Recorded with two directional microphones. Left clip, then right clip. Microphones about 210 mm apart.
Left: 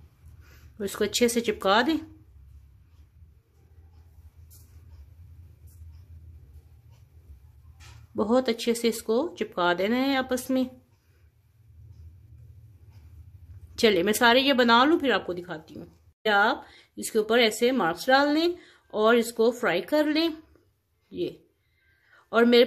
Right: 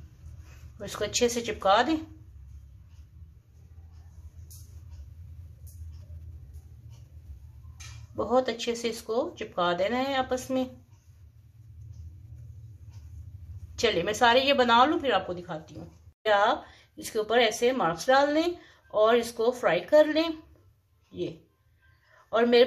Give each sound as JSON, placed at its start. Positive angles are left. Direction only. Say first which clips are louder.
{"t": 0.7, "sound": "speech", "louder": "left 3 dB", "side_deg": 55}
{"t": 8.3, "sound": "speech", "louder": "left 1 dB", "side_deg": 55}
{"t": 13.7, "sound": "speech", "louder": "left 3 dB", "side_deg": 55}